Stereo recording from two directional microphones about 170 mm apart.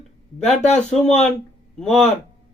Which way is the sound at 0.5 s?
40° left (ahead or behind).